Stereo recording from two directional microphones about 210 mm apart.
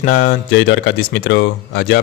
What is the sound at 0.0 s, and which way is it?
A man's voice, 55° left (ahead or behind).